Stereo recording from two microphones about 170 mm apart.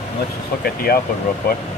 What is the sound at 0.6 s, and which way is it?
Speech, 65° left (ahead or behind).